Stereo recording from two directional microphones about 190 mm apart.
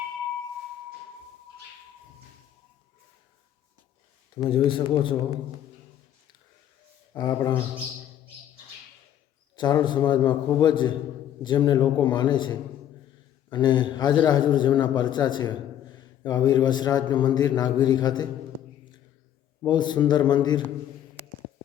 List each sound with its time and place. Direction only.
4.4 s a man's voice: 25° left (ahead or behind)
7.1 s a man's voice: 20° left (ahead or behind)
9.6 s a man's voice: 20° left (ahead or behind)
19.6 s a man's voice: 25° left (ahead or behind)